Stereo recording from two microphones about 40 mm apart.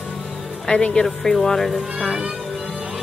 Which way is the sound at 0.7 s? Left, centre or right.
Left.